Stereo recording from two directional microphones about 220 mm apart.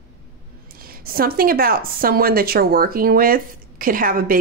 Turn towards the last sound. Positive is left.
turn(degrees=-40)  # may be behind; listen again after turning